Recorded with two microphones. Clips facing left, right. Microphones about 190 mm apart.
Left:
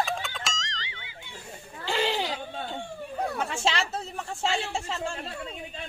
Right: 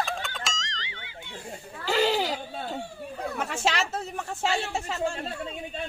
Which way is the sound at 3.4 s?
Centre (ahead or behind).